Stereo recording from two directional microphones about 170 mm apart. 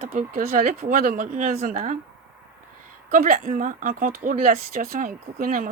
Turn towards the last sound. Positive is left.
turn(degrees=-55)  # may be behind; listen again after turning